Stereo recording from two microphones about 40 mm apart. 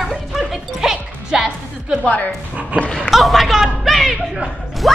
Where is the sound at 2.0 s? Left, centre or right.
Left.